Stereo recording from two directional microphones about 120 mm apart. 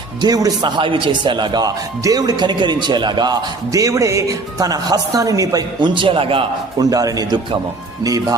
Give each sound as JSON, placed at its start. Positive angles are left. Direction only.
{"t": 0.2, "sound": "speech", "side_deg": -30}
{"t": 0.8, "sound": "speech", "side_deg": -45}
{"t": 6.7, "sound": "speech", "side_deg": -30}